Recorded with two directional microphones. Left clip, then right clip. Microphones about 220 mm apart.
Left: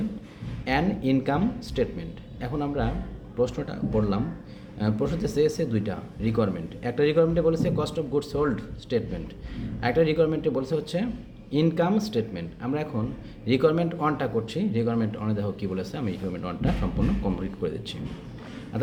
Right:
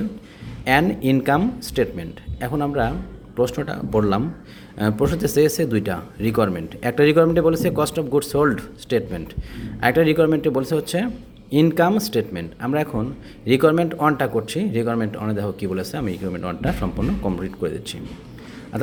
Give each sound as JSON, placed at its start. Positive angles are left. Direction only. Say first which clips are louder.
{"t": 0.6, "sound": "a man's voice", "louder": "right 8 dB", "side_deg": -40}